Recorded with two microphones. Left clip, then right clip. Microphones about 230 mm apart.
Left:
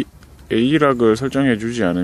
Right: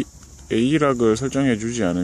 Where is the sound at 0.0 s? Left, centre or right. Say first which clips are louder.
Left 3 dB; centre.